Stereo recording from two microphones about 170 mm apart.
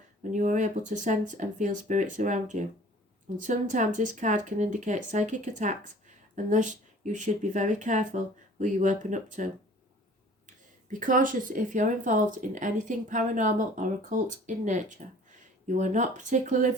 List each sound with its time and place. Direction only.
0.3 s speech: 45° right (ahead or behind)
11.0 s speech: 50° right (ahead or behind)